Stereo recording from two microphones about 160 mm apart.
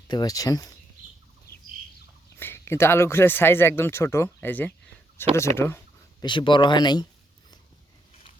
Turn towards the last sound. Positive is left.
turn(degrees=25)  # may be behind; listen again after turning